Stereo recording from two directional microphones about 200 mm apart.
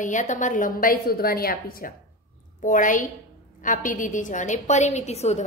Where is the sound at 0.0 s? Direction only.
40° left (ahead or behind).